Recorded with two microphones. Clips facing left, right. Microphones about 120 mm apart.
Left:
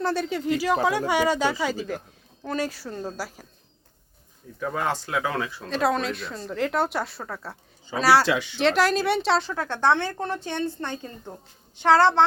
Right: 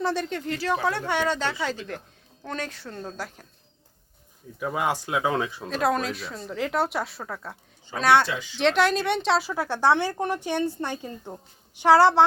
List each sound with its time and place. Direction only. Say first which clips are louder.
0.0 s speech: left 2 dB; centre (ahead or behind)
4.6 s a woman's voice: right 1 dB; 15° right (ahead or behind)
5.6 s speech: left 2 dB; centre (ahead or behind)
8.3 s speech: left 7 dB; 75° left (ahead or behind)
8.5 s a woman's voice: right 1 dB; centre (ahead or behind)